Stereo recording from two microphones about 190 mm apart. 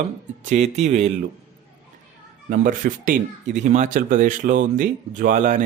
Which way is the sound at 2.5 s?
45° right (ahead or behind).